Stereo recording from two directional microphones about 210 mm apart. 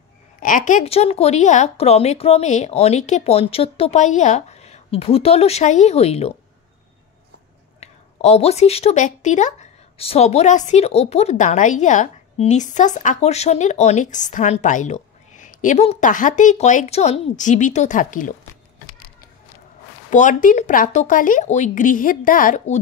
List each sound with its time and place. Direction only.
0.4 s speech: 40° left (ahead or behind)
7.8 s speech: 30° left (ahead or behind)
20.1 s speech: 35° left (ahead or behind)